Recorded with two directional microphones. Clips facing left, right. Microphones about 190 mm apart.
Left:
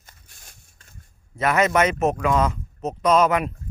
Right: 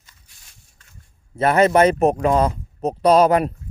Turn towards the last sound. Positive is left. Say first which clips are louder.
# right 4 dB
turn(degrees=-35)  # may be behind; listen again after turning